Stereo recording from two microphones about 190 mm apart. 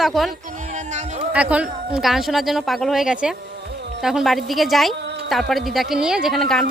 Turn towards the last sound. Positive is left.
turn(degrees=0)  # may be behind; listen again after turning